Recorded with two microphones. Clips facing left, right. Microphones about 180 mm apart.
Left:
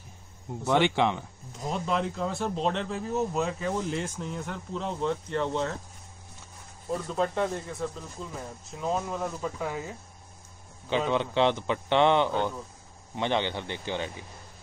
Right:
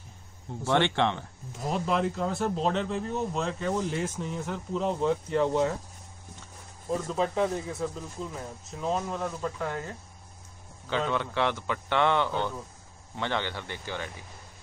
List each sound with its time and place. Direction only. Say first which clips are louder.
0.7 s speech: left 1 dB; 10° left (ahead or behind)
1.6 s speech: right 2 dB; centre (ahead or behind)
6.9 s speech: even; centre (ahead or behind)
10.9 s speech: left 2 dB; 20° left (ahead or behind)